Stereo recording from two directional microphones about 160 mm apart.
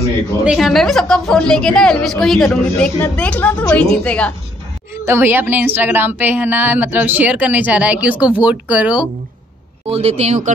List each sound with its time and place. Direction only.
0.5 s a woman's voice: centre (ahead or behind)
5.0 s speech: 15° right (ahead or behind)
9.8 s speech: 40° right (ahead or behind)